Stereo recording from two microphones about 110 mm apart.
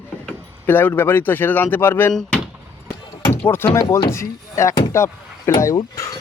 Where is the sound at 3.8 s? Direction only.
30° left (ahead or behind).